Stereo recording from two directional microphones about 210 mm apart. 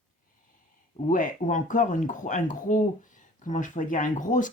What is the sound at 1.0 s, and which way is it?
Speech, 40° left (ahead or behind).